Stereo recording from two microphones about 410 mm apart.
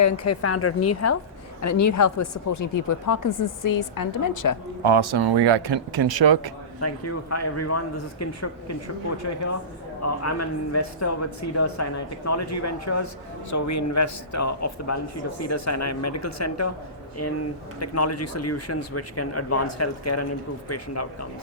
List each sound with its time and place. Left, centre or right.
0.0 s speech: left
4.8 s speech: right
6.7 s speech: left